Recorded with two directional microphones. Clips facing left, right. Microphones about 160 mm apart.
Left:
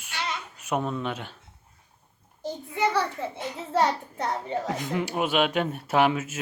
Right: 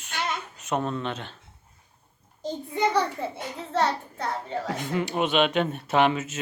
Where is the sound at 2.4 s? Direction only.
15° right (ahead or behind).